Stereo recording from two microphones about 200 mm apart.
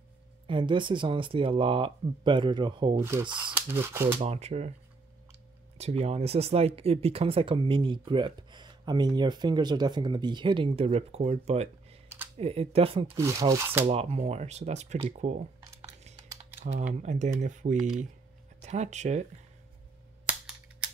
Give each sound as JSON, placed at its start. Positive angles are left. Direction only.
{"t": 0.5, "sound": "speech", "side_deg": -25}
{"t": 4.2, "sound": "speech", "side_deg": -30}
{"t": 5.8, "sound": "speech", "side_deg": -30}
{"t": 13.2, "sound": "speech", "side_deg": -15}
{"t": 13.9, "sound": "speech", "side_deg": -30}
{"t": 16.3, "sound": "typing", "side_deg": -30}
{"t": 17.0, "sound": "speech", "side_deg": -35}
{"t": 20.2, "sound": "cap gun", "side_deg": -5}